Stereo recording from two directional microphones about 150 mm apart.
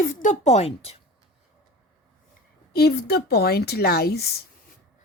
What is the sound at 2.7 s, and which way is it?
Speech, 90° left.